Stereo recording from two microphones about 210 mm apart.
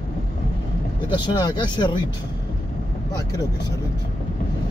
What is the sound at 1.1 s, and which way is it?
Speech, 20° left (ahead or behind).